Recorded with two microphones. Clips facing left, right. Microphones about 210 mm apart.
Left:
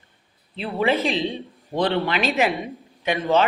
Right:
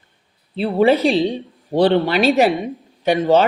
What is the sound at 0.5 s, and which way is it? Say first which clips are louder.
A woman's voice: right 7 dB; 40° right (ahead or behind).